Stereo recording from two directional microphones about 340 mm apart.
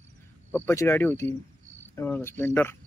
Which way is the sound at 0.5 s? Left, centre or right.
Centre.